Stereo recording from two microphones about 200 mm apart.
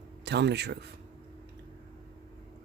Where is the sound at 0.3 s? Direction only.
60° right (ahead or behind).